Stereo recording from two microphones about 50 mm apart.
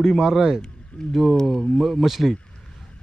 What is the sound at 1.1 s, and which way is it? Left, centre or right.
Speech, centre.